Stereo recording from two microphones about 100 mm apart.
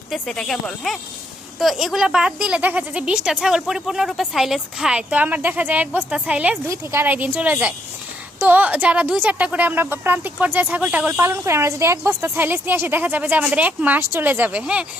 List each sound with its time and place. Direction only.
0.1 s speech: centre (ahead or behind)
6.7 s a woman's voice: 25° right (ahead or behind)
11.2 s a woman's voice: 25° right (ahead or behind)